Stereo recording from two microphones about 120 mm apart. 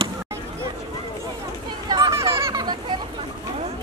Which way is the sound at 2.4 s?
35° right (ahead or behind).